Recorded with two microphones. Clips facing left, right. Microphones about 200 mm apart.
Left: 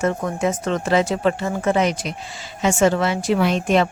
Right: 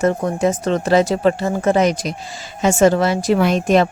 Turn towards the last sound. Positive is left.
turn(degrees=-45)  # may be behind; listen again after turning